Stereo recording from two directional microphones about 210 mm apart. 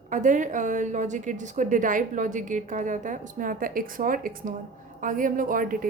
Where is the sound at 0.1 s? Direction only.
35° right (ahead or behind).